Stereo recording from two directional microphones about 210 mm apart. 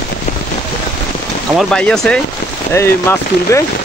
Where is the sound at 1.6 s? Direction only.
5° left (ahead or behind).